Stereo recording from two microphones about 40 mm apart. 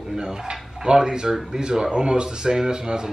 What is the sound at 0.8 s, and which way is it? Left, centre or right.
Speech, centre.